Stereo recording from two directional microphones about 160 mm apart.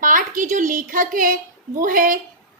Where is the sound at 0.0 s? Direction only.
55° right (ahead or behind).